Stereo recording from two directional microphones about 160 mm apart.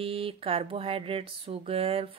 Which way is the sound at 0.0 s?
35° right (ahead or behind).